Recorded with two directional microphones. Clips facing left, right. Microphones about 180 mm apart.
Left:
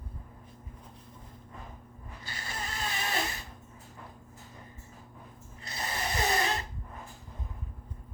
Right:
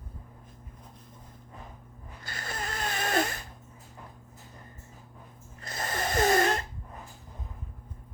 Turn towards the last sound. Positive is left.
turn(degrees=-50)  # may be behind; listen again after turning